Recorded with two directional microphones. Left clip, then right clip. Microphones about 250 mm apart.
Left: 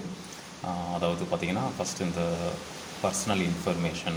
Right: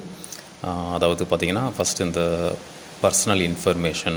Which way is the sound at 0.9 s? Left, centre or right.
Right.